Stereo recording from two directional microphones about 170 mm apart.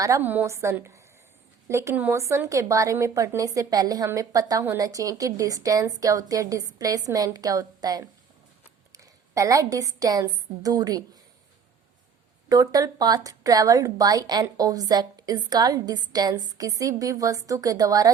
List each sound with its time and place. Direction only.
0.0 s a woman's voice: 15° right (ahead or behind)
12.5 s a woman's voice: 20° right (ahead or behind)